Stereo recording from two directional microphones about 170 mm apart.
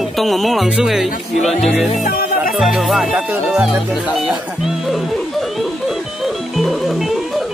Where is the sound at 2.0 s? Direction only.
60° left (ahead or behind).